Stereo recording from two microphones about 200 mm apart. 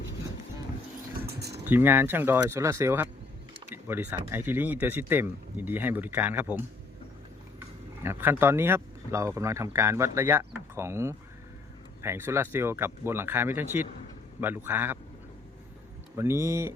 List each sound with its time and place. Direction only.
1.3 s a sound: 55° right (ahead or behind)
1.6 s speech: 10° right (ahead or behind)
8.0 s speech: 10° right (ahead or behind)
16.1 s speech: 15° right (ahead or behind)